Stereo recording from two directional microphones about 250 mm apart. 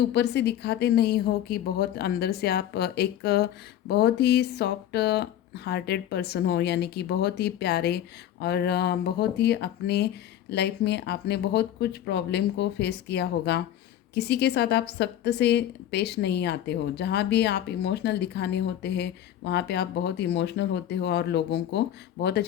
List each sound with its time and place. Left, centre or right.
0.0 s a woman's voice: left